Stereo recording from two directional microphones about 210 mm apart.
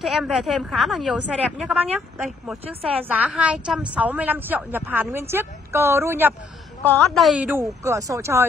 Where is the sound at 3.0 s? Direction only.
5° right (ahead or behind).